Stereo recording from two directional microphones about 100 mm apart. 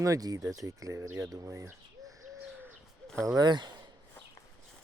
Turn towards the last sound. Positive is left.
turn(degrees=-45)  # may be behind; listen again after turning